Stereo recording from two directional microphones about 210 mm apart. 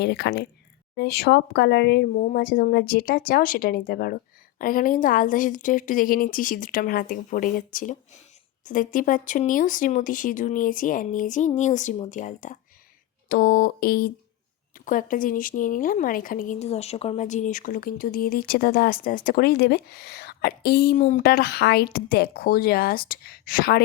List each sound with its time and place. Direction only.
0.0 s speech: 55° left (ahead or behind)
20.9 s speech: 35° left (ahead or behind)